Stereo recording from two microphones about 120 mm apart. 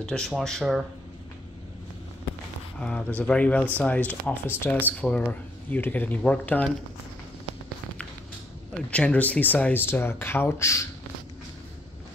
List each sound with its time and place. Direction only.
0.0 s speech: 5° left (ahead or behind)
2.8 s speech: 10° left (ahead or behind)
8.9 s speech: 10° left (ahead or behind)